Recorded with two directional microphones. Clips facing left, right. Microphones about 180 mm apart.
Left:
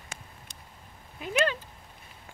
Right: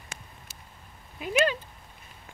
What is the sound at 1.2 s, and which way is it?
Cat, 15° right (ahead or behind).